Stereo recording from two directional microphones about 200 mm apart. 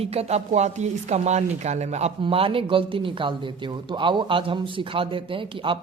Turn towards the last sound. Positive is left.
turn(degrees=-25)  # may be behind; listen again after turning